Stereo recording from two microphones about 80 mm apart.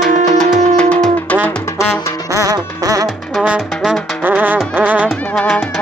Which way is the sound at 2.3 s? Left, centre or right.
Right.